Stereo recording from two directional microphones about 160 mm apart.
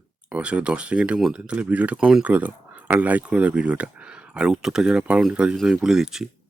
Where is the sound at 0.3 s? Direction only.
5° right (ahead or behind).